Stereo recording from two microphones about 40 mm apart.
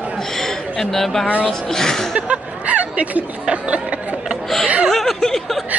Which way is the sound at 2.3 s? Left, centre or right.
Right.